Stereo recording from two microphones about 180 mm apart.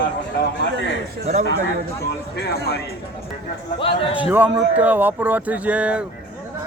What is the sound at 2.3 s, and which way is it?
Speech, 60° left (ahead or behind).